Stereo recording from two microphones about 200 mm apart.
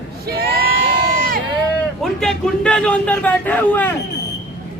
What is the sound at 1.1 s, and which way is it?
Run, 45° right (ahead or behind).